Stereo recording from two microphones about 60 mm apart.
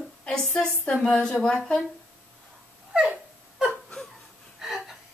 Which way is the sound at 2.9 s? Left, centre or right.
Centre.